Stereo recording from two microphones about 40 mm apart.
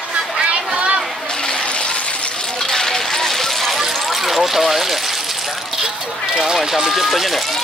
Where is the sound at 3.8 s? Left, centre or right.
Centre.